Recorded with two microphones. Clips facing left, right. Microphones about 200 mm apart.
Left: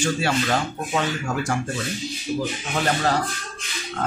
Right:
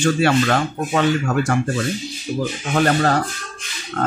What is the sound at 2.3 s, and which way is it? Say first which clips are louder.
Speech: right 4 dB; 45° right (ahead or behind).